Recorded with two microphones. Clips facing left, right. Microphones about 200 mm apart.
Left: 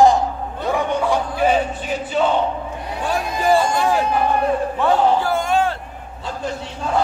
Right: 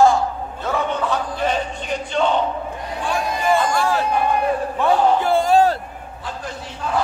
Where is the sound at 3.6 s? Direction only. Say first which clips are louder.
Left 1 dB; 20° left (ahead or behind).